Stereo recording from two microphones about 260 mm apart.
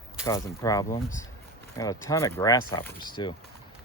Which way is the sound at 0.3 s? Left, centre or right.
Centre.